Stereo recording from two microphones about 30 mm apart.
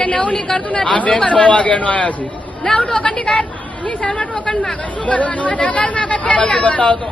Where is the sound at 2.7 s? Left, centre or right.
Left.